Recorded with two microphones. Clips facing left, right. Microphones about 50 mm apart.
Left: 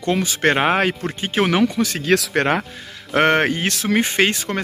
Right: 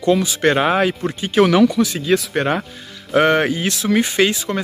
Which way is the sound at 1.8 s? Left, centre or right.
Left.